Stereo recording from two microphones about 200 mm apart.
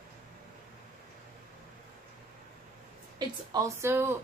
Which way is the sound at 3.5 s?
15° right (ahead or behind).